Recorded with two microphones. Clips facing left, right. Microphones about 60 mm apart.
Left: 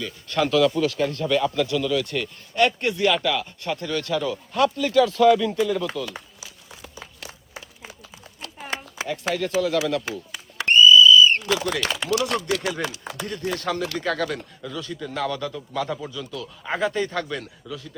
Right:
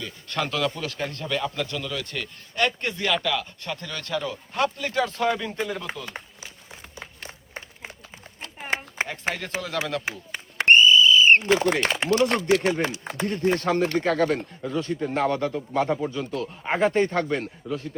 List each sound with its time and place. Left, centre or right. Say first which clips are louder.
0.0 s speech: left 5 dB; right
7.2 s applause: right 1 dB; right
8.4 s a sound: right 3 dB; right
9.8 s speech: left 4 dB; right